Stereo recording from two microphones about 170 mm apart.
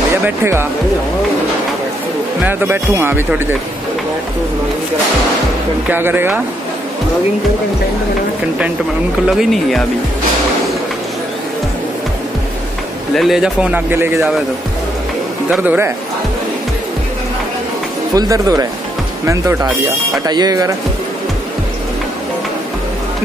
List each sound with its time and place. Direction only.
2.4 s speech: 15° right (ahead or behind)
5.9 s speech: 10° right (ahead or behind)
9.3 s speech: centre (ahead or behind)
13.1 s speech: centre (ahead or behind)
15.5 s speech: 10° right (ahead or behind)
18.1 s speech: 20° right (ahead or behind)